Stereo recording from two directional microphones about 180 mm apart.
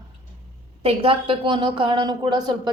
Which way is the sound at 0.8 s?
30° right (ahead or behind).